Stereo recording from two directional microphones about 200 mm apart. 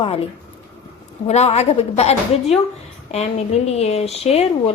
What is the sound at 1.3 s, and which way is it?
A woman's voice, 35° left (ahead or behind).